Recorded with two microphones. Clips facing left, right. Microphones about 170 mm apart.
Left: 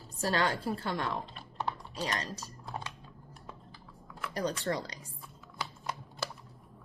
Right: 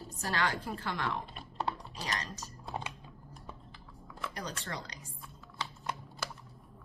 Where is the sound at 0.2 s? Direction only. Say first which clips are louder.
Left 4 dB; 35° left (ahead or behind).